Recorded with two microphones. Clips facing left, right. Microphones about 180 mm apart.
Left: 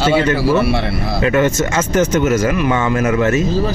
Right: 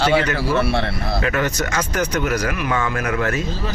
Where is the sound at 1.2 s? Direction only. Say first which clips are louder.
Left 9 dB; 25° left (ahead or behind).